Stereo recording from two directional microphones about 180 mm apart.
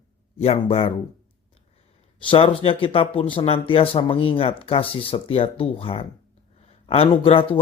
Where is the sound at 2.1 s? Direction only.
30° left (ahead or behind).